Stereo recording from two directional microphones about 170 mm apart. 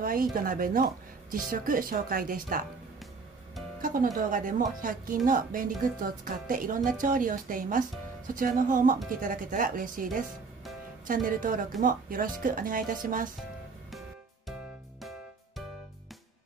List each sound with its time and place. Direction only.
0.0 s speech: 55° right (ahead or behind)
3.8 s speech: 55° right (ahead or behind)
15.0 s music: centre (ahead or behind)